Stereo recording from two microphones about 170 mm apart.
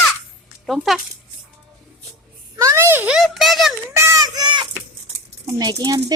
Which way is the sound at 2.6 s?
15° right (ahead or behind).